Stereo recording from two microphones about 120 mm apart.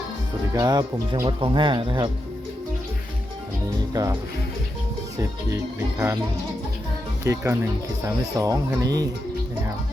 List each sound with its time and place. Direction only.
0.5 s speech: 35° right (ahead or behind)
3.9 s speech: 30° right (ahead or behind)
7.3 s speech: 20° right (ahead or behind)